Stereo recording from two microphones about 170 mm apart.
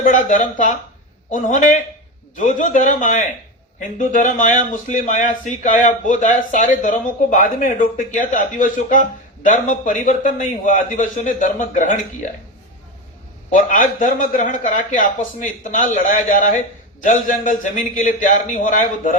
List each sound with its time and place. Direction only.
0.0 s a man's voice: 50° left (ahead or behind)
13.5 s a man's voice: 50° left (ahead or behind)